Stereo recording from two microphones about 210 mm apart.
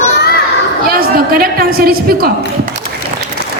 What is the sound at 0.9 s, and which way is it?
A woman's voice, 45° right (ahead or behind).